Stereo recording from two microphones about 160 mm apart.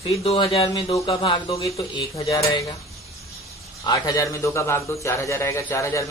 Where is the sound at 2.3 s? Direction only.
25° left (ahead or behind).